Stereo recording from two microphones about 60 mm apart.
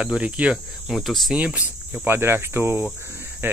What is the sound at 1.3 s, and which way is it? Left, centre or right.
Speech, right.